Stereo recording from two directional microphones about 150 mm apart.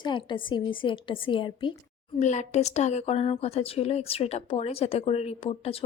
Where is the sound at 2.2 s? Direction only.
50° left (ahead or behind).